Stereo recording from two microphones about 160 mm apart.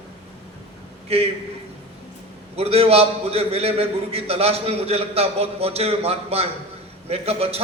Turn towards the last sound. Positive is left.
turn(degrees=-40)  # may be behind; listen again after turning